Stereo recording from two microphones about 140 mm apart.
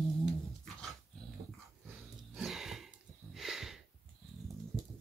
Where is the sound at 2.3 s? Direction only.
Centre (ahead or behind).